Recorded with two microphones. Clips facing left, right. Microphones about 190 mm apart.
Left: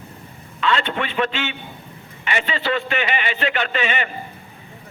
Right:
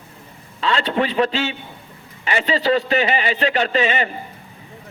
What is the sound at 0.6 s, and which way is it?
A man's voice, 35° right (ahead or behind).